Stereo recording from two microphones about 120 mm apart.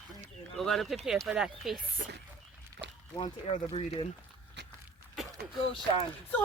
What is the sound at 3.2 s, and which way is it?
Speech, 50° left (ahead or behind).